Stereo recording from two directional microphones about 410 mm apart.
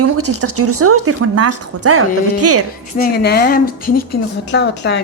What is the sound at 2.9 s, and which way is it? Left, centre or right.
Speech, left.